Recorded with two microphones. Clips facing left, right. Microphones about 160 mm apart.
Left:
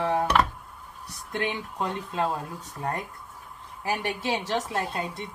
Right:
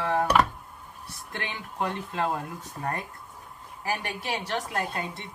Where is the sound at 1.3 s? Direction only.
20° left (ahead or behind).